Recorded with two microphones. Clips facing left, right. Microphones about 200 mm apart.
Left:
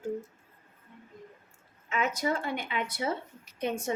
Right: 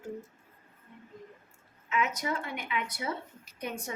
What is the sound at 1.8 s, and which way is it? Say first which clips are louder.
A woman's voice: left 2 dB; 30° left (ahead or behind).